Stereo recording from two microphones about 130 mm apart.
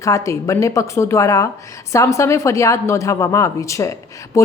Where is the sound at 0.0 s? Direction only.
25° left (ahead or behind).